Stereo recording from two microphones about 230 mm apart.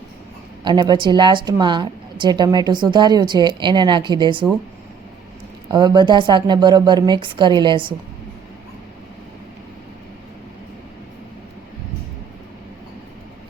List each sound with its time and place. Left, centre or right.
0.6 s a woman's voice: centre
5.7 s a woman's voice: centre